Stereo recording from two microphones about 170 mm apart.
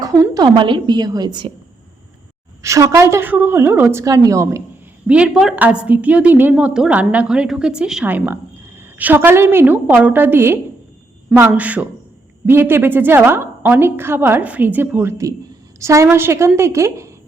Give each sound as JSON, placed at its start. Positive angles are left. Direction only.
{"t": 0.0, "sound": "a woman's voice", "side_deg": -20}
{"t": 2.6, "sound": "a woman's voice", "side_deg": -20}
{"t": 5.0, "sound": "a woman's voice", "side_deg": -5}